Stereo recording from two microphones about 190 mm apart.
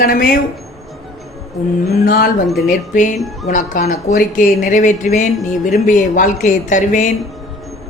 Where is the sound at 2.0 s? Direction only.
50° left (ahead or behind).